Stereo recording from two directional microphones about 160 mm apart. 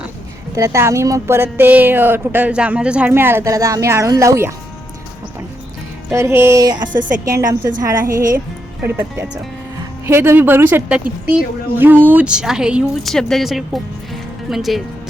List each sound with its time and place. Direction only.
0.5 s speech: 20° right (ahead or behind)
6.1 s speech: 15° right (ahead or behind)
6.9 s speech: 55° right (ahead or behind)
8.8 s a woman's voice: 10° right (ahead or behind)